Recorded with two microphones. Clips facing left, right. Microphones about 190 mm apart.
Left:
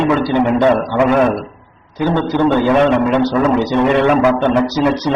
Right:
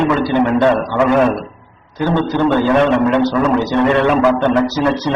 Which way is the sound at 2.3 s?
15° left (ahead or behind).